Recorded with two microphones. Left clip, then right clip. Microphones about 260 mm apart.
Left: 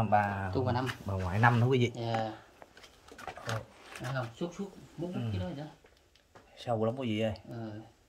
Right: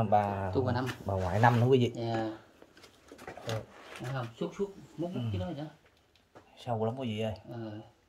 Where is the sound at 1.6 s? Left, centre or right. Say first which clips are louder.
Right 3 dB; centre.